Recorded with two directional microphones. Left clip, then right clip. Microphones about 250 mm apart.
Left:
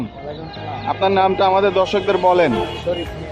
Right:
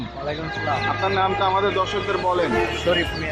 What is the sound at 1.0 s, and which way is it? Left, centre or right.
Speech, centre.